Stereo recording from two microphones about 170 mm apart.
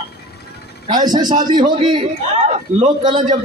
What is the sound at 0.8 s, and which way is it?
A man's voice, 25° right (ahead or behind).